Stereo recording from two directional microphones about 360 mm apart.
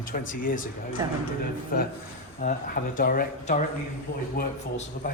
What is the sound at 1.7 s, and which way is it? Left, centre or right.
Speech, left.